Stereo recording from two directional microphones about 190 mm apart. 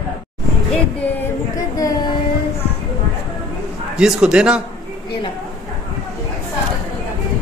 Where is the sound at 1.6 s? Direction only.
20° left (ahead or behind).